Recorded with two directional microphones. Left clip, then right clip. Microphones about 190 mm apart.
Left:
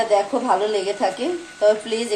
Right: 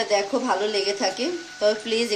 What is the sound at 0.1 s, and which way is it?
Speech, 40° right (ahead or behind).